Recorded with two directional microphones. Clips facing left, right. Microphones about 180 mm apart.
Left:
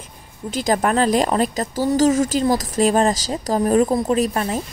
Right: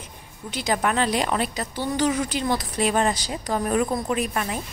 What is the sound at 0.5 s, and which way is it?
Speech, 45° left (ahead or behind).